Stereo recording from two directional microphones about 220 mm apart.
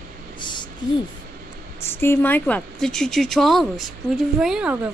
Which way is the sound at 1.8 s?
10° left (ahead or behind).